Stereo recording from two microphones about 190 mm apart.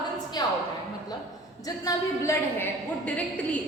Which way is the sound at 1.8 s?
15° left (ahead or behind).